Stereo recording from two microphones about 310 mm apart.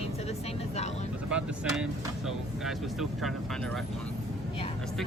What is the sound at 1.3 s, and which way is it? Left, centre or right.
Speech, centre.